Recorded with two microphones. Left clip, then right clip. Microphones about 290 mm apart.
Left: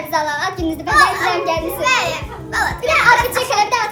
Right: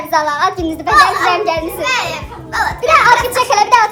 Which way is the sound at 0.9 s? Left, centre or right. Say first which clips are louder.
Right 4 dB; centre.